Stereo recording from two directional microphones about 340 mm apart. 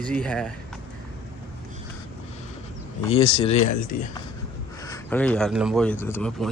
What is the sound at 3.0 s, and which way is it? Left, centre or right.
Speech, centre.